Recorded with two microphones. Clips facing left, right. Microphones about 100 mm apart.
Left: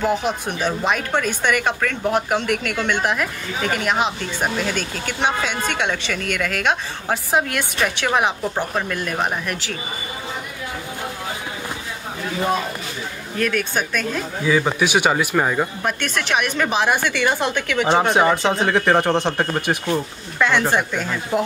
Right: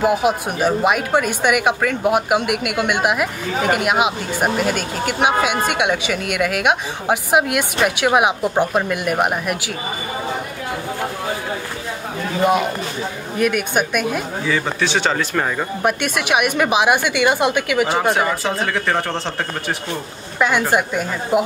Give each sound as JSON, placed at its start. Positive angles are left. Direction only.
{"t": 0.0, "sound": "a woman's voice", "side_deg": -10}
{"t": 13.4, "sound": "a woman's voice", "side_deg": -10}
{"t": 14.5, "sound": "speech", "side_deg": 15}
{"t": 15.8, "sound": "a woman's voice", "side_deg": -10}
{"t": 18.1, "sound": "speech", "side_deg": 20}
{"t": 20.3, "sound": "a woman's voice", "side_deg": -15}